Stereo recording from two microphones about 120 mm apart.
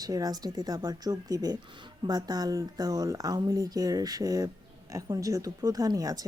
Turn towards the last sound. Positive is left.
turn(degrees=-30)  # may be behind; listen again after turning